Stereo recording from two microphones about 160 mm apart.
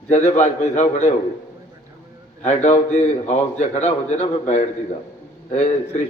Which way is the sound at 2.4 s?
45° left (ahead or behind).